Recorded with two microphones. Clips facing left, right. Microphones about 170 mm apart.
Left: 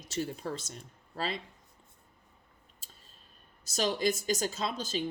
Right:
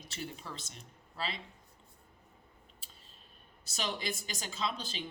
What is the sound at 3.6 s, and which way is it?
Speech, 45° left (ahead or behind).